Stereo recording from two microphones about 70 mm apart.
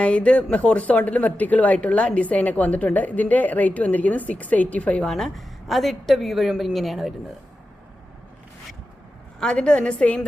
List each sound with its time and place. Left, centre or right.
0.0 s a woman's voice: centre
5.0 s a woman's voice: centre
9.4 s a woman's voice: centre